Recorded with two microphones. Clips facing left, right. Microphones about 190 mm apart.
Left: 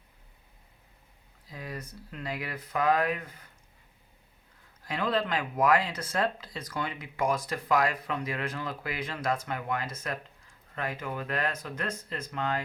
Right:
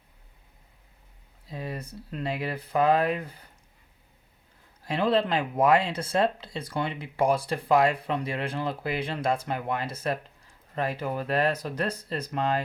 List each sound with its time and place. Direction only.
1.5 s speech: 25° right (ahead or behind)
4.8 s speech: 30° right (ahead or behind)